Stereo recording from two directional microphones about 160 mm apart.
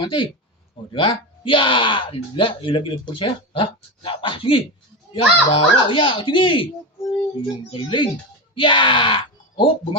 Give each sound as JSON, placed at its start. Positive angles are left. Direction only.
{"t": 0.0, "sound": "speech", "side_deg": 30}